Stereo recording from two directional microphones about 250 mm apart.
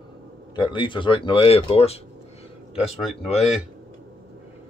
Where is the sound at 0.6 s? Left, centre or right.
Centre.